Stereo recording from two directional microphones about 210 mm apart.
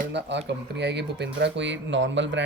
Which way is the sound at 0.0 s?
55° right (ahead or behind).